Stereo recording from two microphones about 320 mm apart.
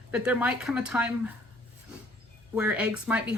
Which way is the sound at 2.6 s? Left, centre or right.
Centre.